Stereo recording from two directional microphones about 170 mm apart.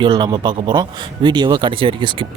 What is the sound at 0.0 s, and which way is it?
Speech, 25° right (ahead or behind).